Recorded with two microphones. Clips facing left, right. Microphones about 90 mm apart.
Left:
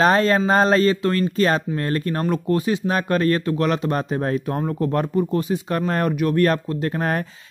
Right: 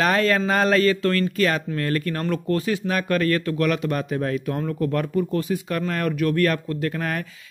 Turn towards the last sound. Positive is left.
turn(degrees=30)  # may be behind; listen again after turning